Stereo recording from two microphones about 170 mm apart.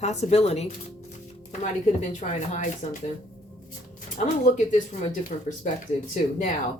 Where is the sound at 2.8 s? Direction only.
45° left (ahead or behind).